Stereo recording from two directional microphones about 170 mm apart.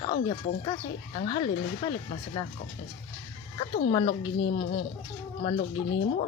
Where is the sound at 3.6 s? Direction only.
30° left (ahead or behind).